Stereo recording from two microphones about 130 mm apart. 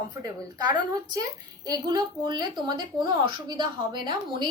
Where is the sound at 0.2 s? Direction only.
35° right (ahead or behind).